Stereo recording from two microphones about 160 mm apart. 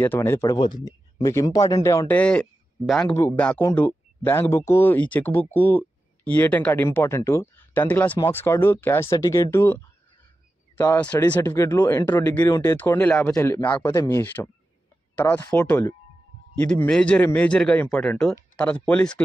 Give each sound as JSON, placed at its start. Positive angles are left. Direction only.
{"t": 0.0, "sound": "speech", "side_deg": 15}
{"t": 11.0, "sound": "speech", "side_deg": 10}
{"t": 13.8, "sound": "speech", "side_deg": 20}